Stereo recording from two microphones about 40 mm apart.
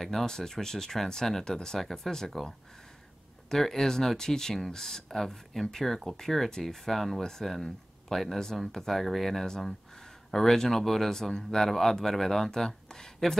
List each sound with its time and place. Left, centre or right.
0.0 s speech: centre